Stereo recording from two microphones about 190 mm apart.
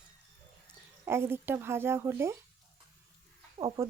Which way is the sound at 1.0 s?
10° right (ahead or behind).